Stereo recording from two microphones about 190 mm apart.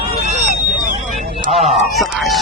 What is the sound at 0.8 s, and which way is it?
Vehicle, 45° right (ahead or behind).